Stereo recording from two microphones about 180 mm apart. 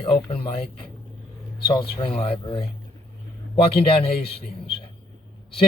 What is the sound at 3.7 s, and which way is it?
A man's voice, 30° left (ahead or behind).